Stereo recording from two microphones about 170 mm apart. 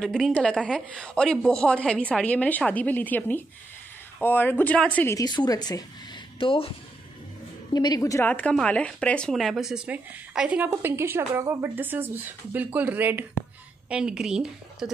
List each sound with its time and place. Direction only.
0.0 s a woman's voice: centre (ahead or behind)
5.1 s a woman's voice: 25° left (ahead or behind)
7.7 s a woman's voice: 25° left (ahead or behind); by 14.9 s 5° right (ahead or behind)